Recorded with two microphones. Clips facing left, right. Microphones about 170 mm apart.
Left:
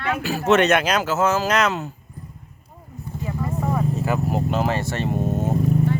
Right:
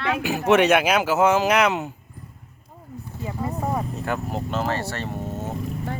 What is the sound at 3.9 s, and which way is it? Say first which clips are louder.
Vehicle: left 4 dB; 5° left (ahead or behind).